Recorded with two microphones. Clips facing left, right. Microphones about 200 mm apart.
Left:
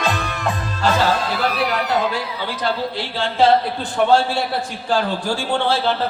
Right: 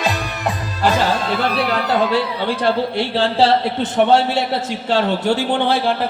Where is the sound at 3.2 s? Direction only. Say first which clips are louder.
Even; 30° right (ahead or behind).